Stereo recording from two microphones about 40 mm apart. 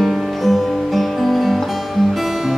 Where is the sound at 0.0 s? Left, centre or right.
Centre.